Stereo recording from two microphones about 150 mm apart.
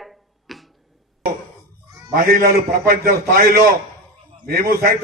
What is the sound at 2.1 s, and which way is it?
A man's voice, 85° right.